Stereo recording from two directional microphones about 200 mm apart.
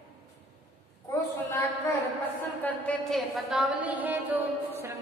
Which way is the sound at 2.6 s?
5° left (ahead or behind).